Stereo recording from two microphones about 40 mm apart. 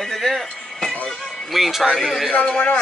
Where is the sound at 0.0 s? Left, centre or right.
Centre.